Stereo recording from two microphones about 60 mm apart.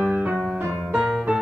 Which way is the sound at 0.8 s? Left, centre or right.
Centre.